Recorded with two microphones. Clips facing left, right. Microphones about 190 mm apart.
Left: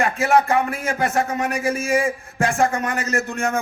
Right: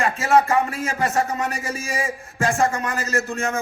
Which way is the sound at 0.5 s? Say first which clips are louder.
Left 1 dB; 35° right (ahead or behind).